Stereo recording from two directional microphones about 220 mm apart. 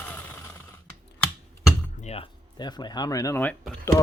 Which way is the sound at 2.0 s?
25° left (ahead or behind).